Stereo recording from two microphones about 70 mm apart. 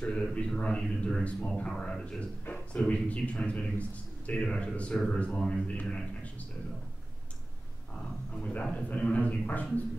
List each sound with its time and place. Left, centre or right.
0.0 s a man's voice: centre
8.4 s a man's voice: centre